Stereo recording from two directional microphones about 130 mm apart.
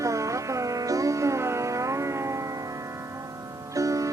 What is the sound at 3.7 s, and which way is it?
Music, 25° right (ahead or behind).